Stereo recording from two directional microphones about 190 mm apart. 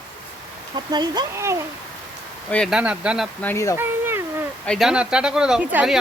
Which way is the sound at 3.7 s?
10° right (ahead or behind).